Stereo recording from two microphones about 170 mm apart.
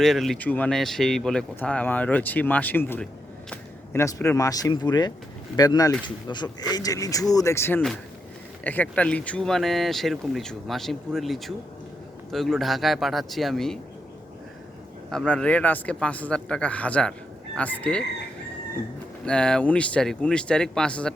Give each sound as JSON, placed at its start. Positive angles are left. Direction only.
{"t": 0.0, "sound": "speech", "side_deg": 0}
{"t": 15.1, "sound": "speech", "side_deg": 5}
{"t": 19.2, "sound": "speech", "side_deg": 5}